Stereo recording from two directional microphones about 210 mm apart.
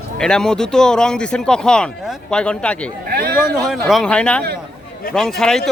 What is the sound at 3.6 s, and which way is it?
Speech, centre (ahead or behind).